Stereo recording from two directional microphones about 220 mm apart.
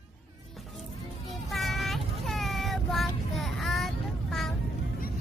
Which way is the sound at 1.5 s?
Centre (ahead or behind).